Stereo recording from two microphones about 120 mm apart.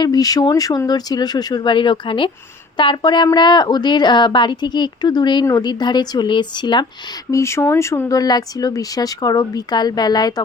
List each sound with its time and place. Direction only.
0.0 s speech: 30° left (ahead or behind)
7.3 s speech: 25° left (ahead or behind)